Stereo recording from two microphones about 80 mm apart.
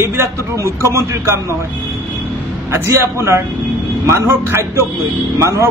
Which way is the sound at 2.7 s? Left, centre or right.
Right.